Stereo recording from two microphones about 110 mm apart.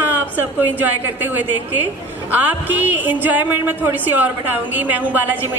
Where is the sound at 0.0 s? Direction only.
15° right (ahead or behind).